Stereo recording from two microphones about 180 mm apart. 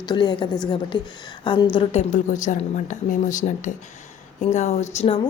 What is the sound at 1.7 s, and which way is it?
A woman's voice, 40° left (ahead or behind).